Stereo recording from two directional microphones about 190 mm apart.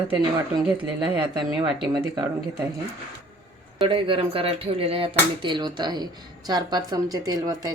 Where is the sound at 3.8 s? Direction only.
25° right (ahead or behind).